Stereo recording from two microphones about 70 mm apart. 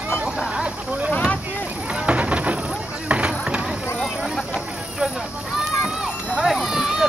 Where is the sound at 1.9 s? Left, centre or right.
Centre.